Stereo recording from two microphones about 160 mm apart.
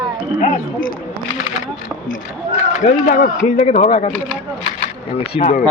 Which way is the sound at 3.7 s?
45° left (ahead or behind).